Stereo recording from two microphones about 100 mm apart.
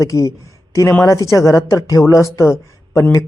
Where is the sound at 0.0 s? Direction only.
30° left (ahead or behind).